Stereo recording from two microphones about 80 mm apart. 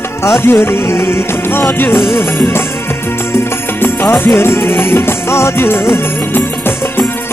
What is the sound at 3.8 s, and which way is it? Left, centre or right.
Music, left.